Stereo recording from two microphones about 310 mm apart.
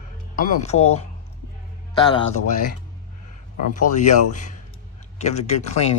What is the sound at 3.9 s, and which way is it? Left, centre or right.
Speech, left.